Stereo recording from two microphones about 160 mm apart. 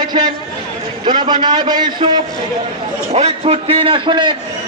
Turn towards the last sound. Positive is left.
turn(degrees=-30)  # may be behind; listen again after turning